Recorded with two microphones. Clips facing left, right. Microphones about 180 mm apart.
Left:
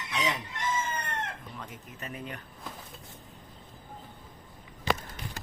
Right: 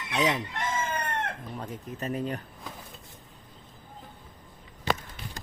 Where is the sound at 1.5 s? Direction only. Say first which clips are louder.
Right 7 dB; 35° right (ahead or behind).